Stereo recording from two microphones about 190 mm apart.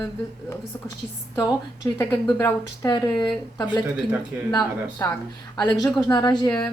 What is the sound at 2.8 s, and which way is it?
A woman's voice, 25° left (ahead or behind).